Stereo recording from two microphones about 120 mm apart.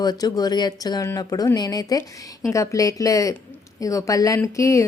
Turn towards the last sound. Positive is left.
turn(degrees=25)  # may be behind; listen again after turning